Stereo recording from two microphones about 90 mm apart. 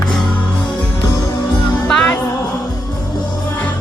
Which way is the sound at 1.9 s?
10° left (ahead or behind).